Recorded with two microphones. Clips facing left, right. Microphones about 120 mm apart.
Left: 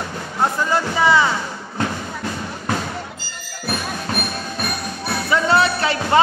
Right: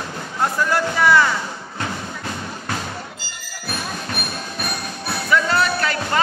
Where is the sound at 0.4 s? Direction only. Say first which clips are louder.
Left 1 dB; 15° left (ahead or behind).